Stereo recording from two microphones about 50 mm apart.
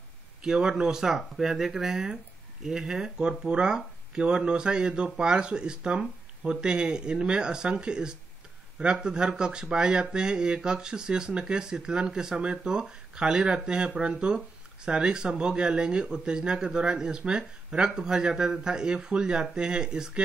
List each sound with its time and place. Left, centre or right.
0.4 s speech: centre